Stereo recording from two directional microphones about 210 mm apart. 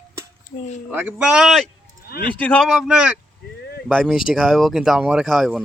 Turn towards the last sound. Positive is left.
turn(degrees=0)  # may be behind; listen again after turning